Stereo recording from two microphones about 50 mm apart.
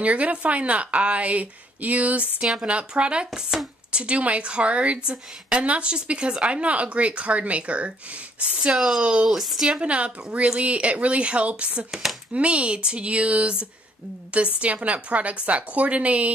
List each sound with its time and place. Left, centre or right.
0.0 s speech: right
8.5 s a woman's voice: centre
9.8 s speech: right
11.9 s a woman's voice: centre
12.4 s speech: right